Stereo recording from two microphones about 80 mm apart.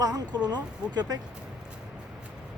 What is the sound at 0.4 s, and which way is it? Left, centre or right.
Speech, right.